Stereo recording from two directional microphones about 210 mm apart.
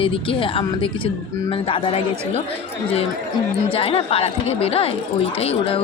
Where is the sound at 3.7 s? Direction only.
25° left (ahead or behind).